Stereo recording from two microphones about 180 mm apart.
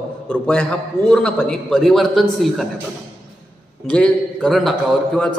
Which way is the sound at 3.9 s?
5° left (ahead or behind).